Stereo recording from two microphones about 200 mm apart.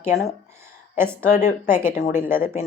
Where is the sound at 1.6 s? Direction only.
10° right (ahead or behind).